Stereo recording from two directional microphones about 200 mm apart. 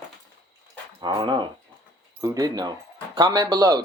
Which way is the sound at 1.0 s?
25° right (ahead or behind).